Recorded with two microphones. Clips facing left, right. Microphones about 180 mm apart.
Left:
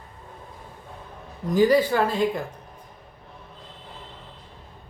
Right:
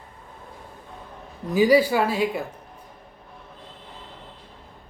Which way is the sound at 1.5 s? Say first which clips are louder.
Right 1 dB; 10° right (ahead or behind).